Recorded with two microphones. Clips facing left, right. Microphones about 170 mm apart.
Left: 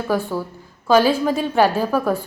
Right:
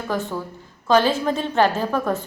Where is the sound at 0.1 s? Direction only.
10° left (ahead or behind).